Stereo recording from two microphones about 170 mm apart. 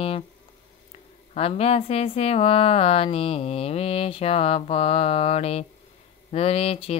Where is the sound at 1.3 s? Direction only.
35° left (ahead or behind).